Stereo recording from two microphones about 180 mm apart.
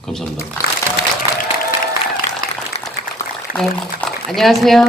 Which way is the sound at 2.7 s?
35° left (ahead or behind).